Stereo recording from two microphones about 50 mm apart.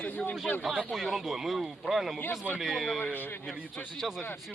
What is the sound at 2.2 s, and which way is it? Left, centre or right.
Speech, left.